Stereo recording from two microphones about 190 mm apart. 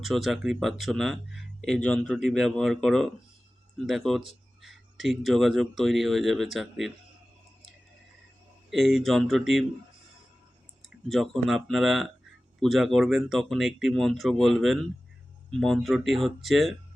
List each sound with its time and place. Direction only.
0.0 s speech: centre (ahead or behind)
8.7 s speech: centre (ahead or behind)
10.8 s speech: centre (ahead or behind)